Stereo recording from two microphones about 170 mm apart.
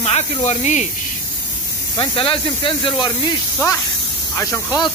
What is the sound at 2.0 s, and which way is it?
Speech, 30° left (ahead or behind).